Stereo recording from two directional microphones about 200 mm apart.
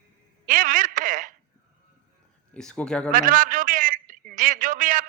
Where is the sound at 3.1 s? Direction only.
45° right (ahead or behind).